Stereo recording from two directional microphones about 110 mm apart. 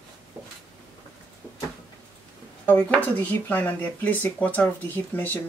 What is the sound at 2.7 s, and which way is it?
Speech, 15° left (ahead or behind).